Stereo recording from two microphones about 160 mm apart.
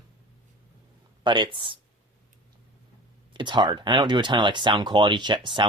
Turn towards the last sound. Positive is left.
turn(degrees=-30)  # may be behind; listen again after turning